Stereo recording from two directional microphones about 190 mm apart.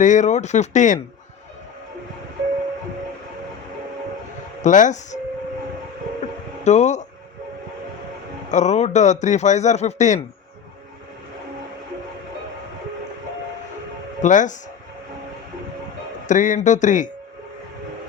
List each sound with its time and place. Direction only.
0.0 s a man's voice: 40° left (ahead or behind)
4.6 s a man's voice: 40° left (ahead or behind)
6.7 s a man's voice: 40° left (ahead or behind)
8.4 s a man's voice: 40° left (ahead or behind)
14.2 s a man's voice: 40° left (ahead or behind)
16.2 s a man's voice: 40° left (ahead or behind)